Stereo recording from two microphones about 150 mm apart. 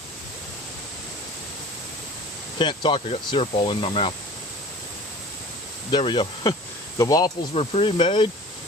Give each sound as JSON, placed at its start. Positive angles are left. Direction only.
{"t": 2.6, "sound": "speech", "side_deg": 30}
{"t": 5.9, "sound": "speech", "side_deg": 35}
{"t": 7.5, "sound": "speech", "side_deg": 40}